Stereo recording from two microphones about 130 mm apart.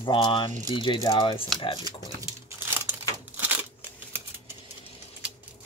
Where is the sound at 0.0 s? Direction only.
40° left (ahead or behind).